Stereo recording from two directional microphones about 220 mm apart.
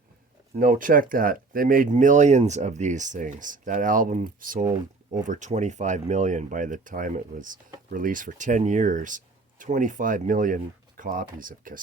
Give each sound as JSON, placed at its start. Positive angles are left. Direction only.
{"t": 0.6, "sound": "speech", "side_deg": -40}